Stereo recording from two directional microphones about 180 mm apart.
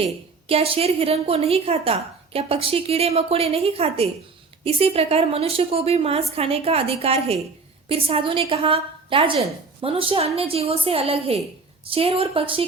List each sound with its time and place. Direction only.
0.4 s a woman's voice: 35° right (ahead or behind)